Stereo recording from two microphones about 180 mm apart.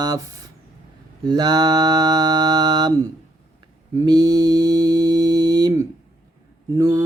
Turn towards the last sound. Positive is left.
turn(degrees=-20)  # may be behind; listen again after turning